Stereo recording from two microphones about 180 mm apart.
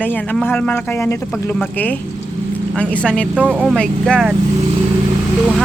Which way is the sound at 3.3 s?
10° right (ahead or behind).